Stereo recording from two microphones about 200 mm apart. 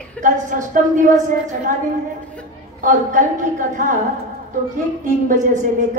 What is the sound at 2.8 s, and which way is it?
A woman's voice, 40° right (ahead or behind).